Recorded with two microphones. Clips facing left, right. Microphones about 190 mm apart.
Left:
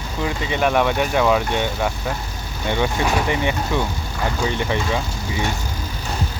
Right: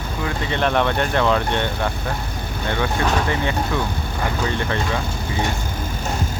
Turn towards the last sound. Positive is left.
turn(degrees=15)  # may be behind; listen again after turning